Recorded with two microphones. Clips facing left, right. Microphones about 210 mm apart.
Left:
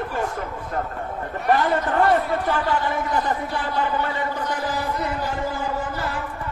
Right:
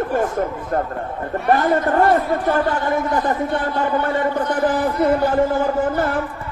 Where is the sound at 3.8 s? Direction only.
50° right (ahead or behind).